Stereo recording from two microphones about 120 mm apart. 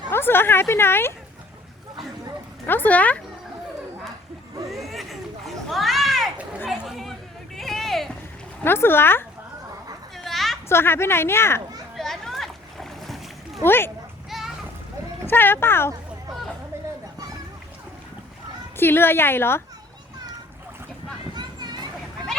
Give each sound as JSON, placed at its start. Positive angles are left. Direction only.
{"t": 0.1, "sound": "speech", "side_deg": 20}
{"t": 2.6, "sound": "speech", "side_deg": 15}
{"t": 5.7, "sound": "a sound", "side_deg": 0}
{"t": 8.6, "sound": "speech", "side_deg": 20}
{"t": 10.2, "sound": "a sound", "side_deg": 0}
{"t": 10.7, "sound": "speech", "side_deg": 20}
{"t": 11.9, "sound": "splash", "side_deg": 5}
{"t": 13.7, "sound": "speech", "side_deg": 20}
{"t": 14.3, "sound": "splash", "side_deg": 0}
{"t": 15.3, "sound": "speech", "side_deg": 15}
{"t": 16.7, "sound": "a sound", "side_deg": -25}
{"t": 18.8, "sound": "speech", "side_deg": 20}
{"t": 21.3, "sound": "a sound", "side_deg": -35}